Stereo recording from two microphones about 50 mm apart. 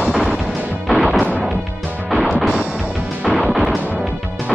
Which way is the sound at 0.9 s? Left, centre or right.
Centre.